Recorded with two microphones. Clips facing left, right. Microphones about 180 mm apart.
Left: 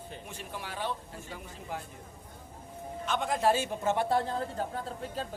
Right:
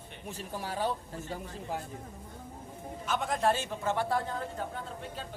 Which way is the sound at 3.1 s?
Centre (ahead or behind).